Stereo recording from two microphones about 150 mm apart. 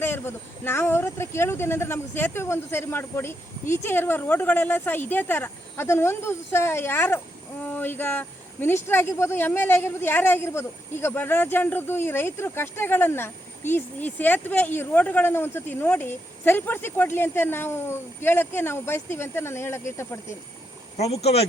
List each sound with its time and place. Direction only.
0.0 s speech: 15° left (ahead or behind)
21.0 s speech: 45° left (ahead or behind)